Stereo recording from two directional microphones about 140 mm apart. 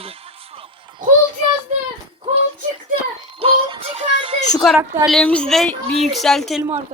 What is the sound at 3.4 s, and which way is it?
Music, 40° right (ahead or behind).